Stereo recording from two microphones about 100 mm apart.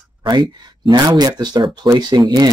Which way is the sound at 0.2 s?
45° right (ahead or behind).